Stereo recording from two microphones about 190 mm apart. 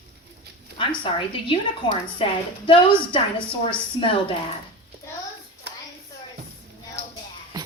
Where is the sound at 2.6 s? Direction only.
25° left (ahead or behind).